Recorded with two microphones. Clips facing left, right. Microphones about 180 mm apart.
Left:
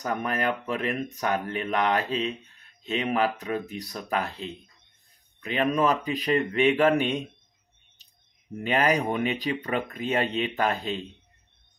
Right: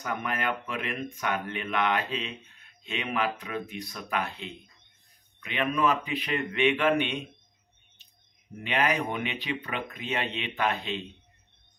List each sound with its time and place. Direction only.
0.0 s speech: 35° left (ahead or behind)
8.6 s speech: 40° left (ahead or behind)